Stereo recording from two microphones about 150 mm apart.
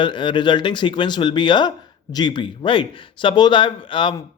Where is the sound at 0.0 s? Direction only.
30° left (ahead or behind).